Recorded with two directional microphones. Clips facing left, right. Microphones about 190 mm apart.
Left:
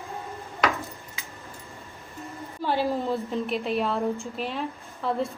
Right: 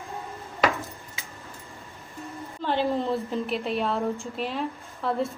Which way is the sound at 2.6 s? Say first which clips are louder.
Even; 10° left (ahead or behind).